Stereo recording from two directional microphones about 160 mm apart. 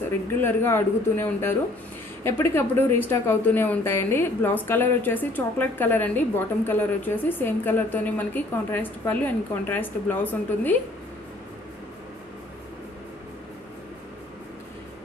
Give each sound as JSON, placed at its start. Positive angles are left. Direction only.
{"t": 0.4, "sound": "speech", "side_deg": 15}